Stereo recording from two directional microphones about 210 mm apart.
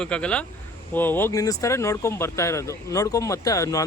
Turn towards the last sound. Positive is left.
turn(degrees=15)  # may be behind; listen again after turning